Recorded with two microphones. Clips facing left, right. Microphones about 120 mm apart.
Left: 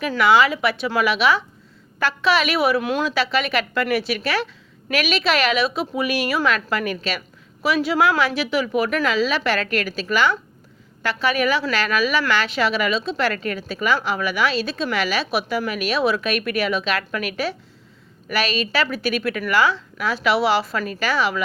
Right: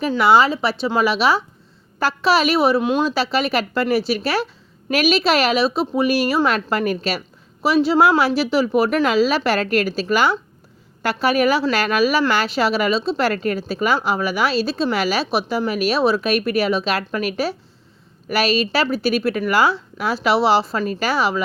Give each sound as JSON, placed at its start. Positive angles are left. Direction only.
{"t": 0.2, "sound": "speech", "side_deg": -35}